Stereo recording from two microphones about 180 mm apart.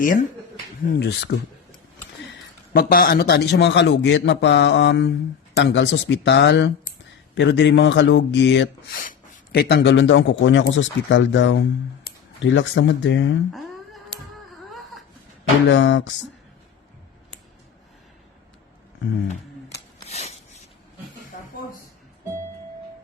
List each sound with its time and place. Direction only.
0.0 s speech: 50° left (ahead or behind)
0.9 s a man's voice: 70° left (ahead or behind)
2.7 s a man's voice: 55° left (ahead or behind); by 9.0 s 75° left (ahead or behind)
9.0 s a man's voice: 55° left (ahead or behind); by 13.3 s 90° left
13.5 s humming: centre (ahead or behind)
14.7 s wail: centre (ahead or behind)
15.7 s a man's voice: 90° left
20.1 s filing: 35° left (ahead or behind)
21.3 s a sound: 45° left (ahead or behind)